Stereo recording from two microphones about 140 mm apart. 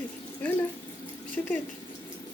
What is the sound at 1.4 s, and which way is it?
Speech, 15° left (ahead or behind).